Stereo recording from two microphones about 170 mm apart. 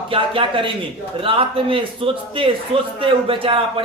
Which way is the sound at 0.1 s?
30° right (ahead or behind).